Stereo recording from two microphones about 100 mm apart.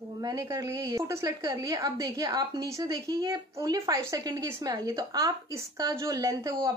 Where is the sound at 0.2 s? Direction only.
40° right (ahead or behind).